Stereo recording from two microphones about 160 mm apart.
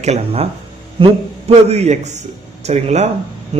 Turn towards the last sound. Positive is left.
turn(degrees=-40)  # may be behind; listen again after turning